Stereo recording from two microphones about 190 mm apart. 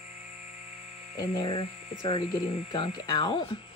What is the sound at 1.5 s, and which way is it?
Speech, 35° left (ahead or behind).